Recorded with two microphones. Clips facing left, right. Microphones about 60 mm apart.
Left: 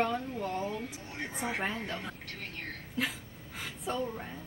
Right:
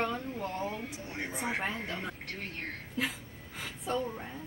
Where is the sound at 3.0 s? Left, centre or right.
Centre.